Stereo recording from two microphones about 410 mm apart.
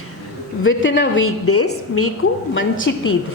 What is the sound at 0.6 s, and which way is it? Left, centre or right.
A woman's voice, left.